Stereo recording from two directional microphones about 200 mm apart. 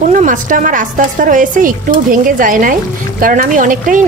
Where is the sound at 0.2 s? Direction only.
40° right (ahead or behind).